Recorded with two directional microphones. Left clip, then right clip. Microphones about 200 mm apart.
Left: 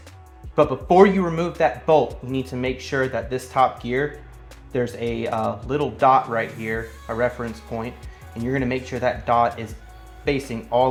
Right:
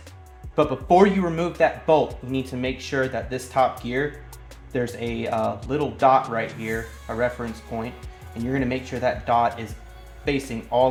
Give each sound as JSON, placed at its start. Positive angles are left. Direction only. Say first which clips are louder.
{"t": 0.5, "sound": "speech", "louder": "left 2 dB", "side_deg": 25}